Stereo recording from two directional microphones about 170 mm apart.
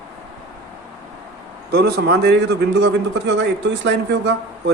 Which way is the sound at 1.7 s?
70° right (ahead or behind).